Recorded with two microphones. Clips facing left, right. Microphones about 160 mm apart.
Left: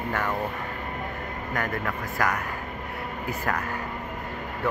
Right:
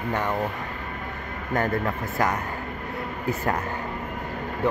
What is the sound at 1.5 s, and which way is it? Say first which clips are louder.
Speech: right 5 dB; 25° right (ahead or behind).